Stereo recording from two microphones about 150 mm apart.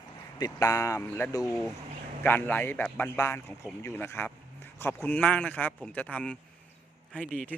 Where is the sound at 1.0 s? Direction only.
10° left (ahead or behind).